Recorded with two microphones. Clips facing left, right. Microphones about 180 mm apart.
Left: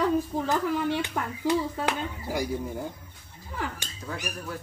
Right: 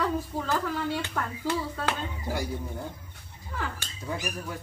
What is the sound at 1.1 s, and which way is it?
Speech, 15° left (ahead or behind).